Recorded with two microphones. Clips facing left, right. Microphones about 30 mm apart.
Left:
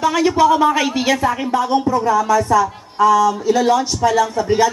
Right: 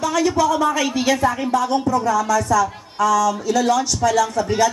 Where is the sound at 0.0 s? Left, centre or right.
Left.